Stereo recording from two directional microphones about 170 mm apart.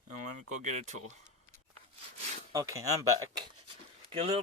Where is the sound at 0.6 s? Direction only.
45° right (ahead or behind).